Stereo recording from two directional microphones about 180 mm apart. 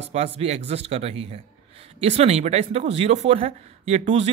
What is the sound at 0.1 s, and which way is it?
A man's voice, 35° right (ahead or behind).